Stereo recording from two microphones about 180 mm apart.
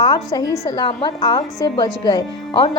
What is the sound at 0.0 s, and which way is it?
A woman's voice, 20° left (ahead or behind).